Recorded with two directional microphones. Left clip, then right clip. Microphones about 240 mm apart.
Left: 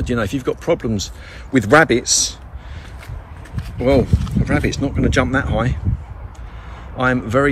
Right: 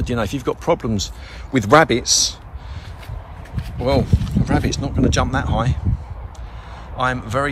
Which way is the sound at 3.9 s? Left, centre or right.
Centre.